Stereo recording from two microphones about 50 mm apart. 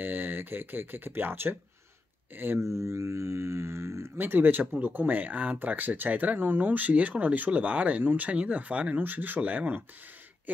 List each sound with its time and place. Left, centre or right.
0.0 s speech: right
2.6 s speech: right
4.2 s speech: right
8.0 s speech: right
8.3 s speech: right